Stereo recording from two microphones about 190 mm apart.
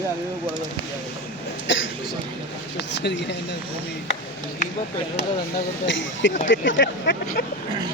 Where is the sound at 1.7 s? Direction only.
80° left.